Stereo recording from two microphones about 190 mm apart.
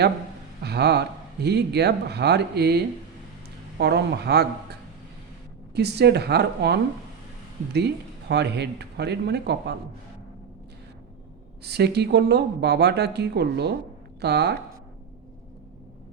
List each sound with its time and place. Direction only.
0.6 s speech: 60° right (ahead or behind)
5.7 s speech: 60° right (ahead or behind)
8.3 s speech: 60° right (ahead or behind)
11.6 s speech: 60° right (ahead or behind)